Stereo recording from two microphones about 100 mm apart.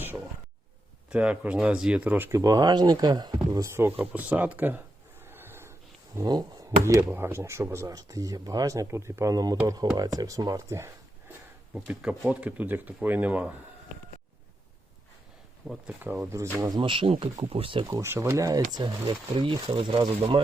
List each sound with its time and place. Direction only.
1.1 s speech: 15° right (ahead or behind)
2.3 s speech: 35° right (ahead or behind)
3.5 s speech: 30° right (ahead or behind)
5.2 s a sound: 20° right (ahead or behind)
6.2 s speech: 45° right (ahead or behind)
6.7 s speech: 30° right (ahead or behind)
11.7 s speech: 10° right (ahead or behind)
15.9 s speech: 20° right (ahead or behind)
16.8 s speech: 60° right (ahead or behind)
18.0 s speech: 25° right (ahead or behind); by 20.4 s 60° right (ahead or behind)